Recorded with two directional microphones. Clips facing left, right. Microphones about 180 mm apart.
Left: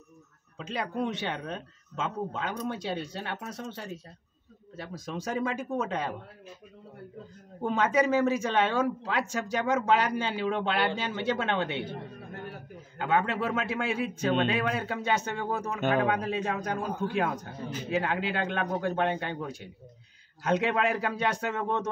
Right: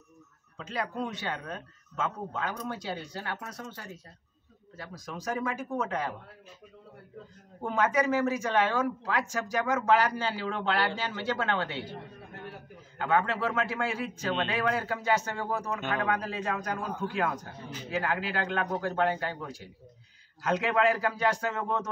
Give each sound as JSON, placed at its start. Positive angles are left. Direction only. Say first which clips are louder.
{"t": 0.6, "sound": "a man's voice", "louder": "left 2 dB", "side_deg": 20}
{"t": 7.6, "sound": "a man's voice", "louder": "left 2 dB", "side_deg": 25}
{"t": 13.0, "sound": "a man's voice", "louder": "even", "side_deg": 20}